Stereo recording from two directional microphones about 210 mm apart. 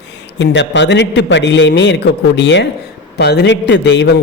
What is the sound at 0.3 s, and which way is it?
A man's voice, 55° left (ahead or behind).